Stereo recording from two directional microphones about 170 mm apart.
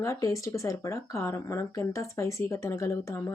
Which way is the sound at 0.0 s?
20° left (ahead or behind).